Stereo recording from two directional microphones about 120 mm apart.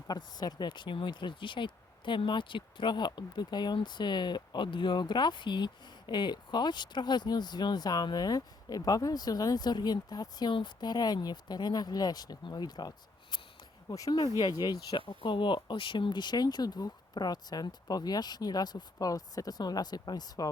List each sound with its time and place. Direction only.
0.1 s speech: 35° left (ahead or behind)
13.9 s speech: 35° left (ahead or behind)